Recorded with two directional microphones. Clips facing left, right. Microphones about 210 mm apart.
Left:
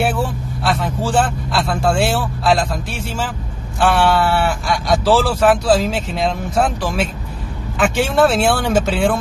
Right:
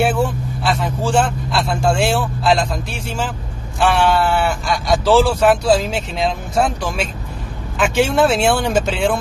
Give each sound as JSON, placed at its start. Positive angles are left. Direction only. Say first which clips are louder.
{"t": 0.7, "sound": "speech", "louder": "even", "side_deg": 0}